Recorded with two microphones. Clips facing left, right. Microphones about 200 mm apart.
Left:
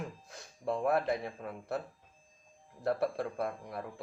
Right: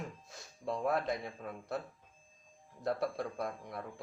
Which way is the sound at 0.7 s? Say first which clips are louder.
Left 3 dB; 30° left (ahead or behind).